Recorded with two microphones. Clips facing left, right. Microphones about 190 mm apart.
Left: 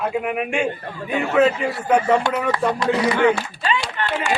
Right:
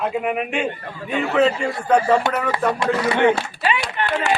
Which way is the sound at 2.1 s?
25° right (ahead or behind).